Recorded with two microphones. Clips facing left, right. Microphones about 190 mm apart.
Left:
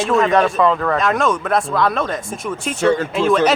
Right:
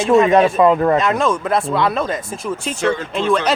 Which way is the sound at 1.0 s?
Centre (ahead or behind).